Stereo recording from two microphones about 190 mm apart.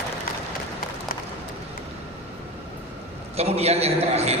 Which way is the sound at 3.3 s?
35° right (ahead or behind).